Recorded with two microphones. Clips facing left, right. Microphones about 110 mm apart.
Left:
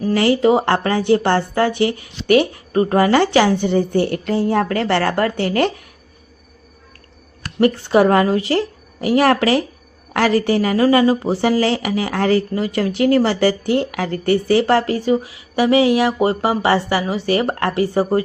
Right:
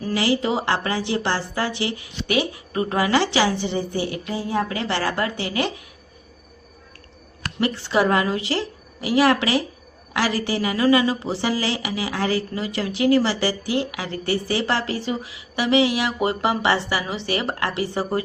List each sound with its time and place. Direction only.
0.1 s a woman's voice: 50° left (ahead or behind)
7.6 s a woman's voice: 45° left (ahead or behind)